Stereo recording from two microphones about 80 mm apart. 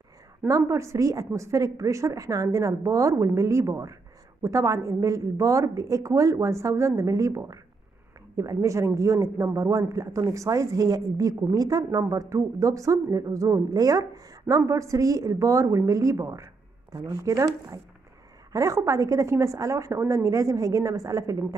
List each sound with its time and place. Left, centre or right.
0.5 s a woman's voice: right